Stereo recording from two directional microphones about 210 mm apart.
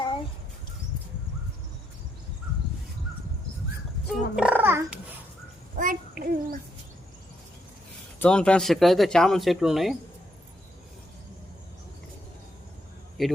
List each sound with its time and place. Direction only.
4.0 s wild animals: 40° left (ahead or behind)
4.4 s music: 5° right (ahead or behind)
5.7 s child singing: 40° right (ahead or behind)
8.2 s speech: 5° left (ahead or behind)
13.2 s speech: centre (ahead or behind)